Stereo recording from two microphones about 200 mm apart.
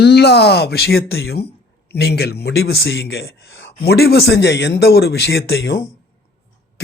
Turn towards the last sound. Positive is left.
turn(degrees=65)  # may be behind; listen again after turning